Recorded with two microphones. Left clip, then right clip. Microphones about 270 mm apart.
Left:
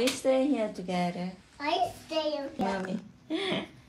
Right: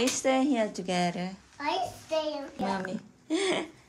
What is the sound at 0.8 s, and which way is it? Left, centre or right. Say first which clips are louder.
A child's voice: right 2 dB; centre.